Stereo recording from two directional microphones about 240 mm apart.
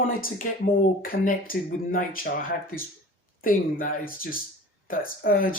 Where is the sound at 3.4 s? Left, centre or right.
Left.